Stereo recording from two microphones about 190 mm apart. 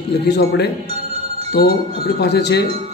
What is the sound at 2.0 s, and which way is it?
Speech, 60° left (ahead or behind).